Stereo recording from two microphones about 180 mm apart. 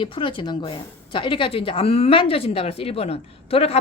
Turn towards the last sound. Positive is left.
turn(degrees=30)  # may be behind; listen again after turning